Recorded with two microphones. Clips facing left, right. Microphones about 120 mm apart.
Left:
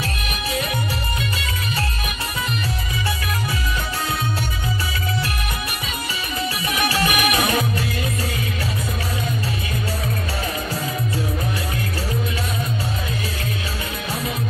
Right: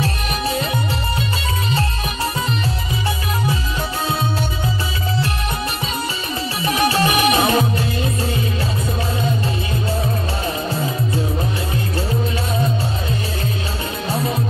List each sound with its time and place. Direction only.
0.0 s music: 30° right (ahead or behind)
6.6 s music: 30° right (ahead or behind)